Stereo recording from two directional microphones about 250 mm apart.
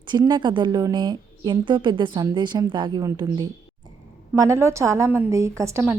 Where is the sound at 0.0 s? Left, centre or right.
Centre.